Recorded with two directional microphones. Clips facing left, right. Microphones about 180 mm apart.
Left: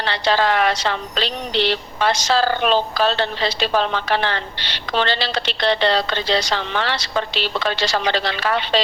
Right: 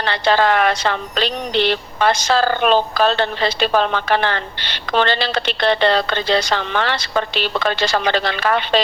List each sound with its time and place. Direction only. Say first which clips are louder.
0.0 s speech: right 3 dB; 50° right (ahead or behind)